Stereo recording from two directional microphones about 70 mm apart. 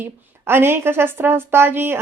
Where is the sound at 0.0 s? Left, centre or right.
Right.